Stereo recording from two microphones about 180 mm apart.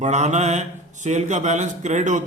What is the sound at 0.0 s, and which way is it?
A man's voice, 40° right (ahead or behind).